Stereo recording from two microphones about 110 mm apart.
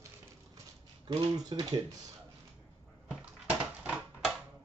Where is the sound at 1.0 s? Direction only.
40° right (ahead or behind).